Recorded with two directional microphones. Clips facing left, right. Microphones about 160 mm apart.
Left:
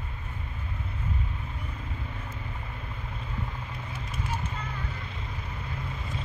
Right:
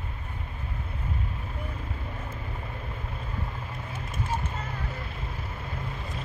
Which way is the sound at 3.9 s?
50° right (ahead or behind).